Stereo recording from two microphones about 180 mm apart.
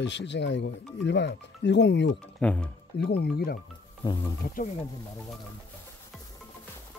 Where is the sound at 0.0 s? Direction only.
80° left.